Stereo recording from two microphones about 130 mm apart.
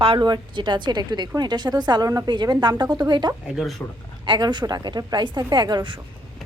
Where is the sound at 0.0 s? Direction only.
40° right (ahead or behind).